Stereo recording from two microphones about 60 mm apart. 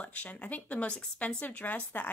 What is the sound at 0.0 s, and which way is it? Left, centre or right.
A woman's voice, left.